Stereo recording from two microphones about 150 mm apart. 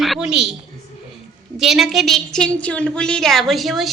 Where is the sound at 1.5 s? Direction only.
Centre (ahead or behind).